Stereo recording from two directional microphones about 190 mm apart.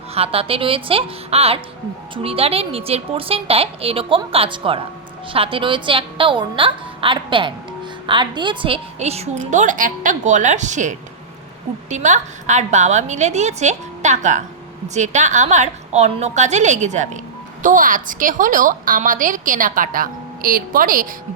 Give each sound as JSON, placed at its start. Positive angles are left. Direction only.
{"t": 0.1, "sound": "a woman's voice", "side_deg": -30}